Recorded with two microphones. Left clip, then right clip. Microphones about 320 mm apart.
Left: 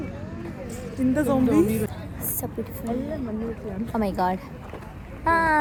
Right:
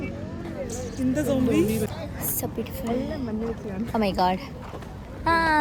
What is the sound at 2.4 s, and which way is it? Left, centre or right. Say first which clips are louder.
Speech: right 1 dB; centre.